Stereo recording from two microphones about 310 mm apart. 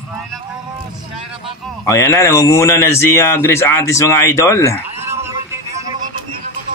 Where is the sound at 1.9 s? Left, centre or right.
Centre.